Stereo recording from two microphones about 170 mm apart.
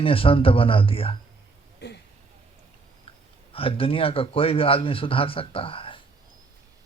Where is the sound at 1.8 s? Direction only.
80° left.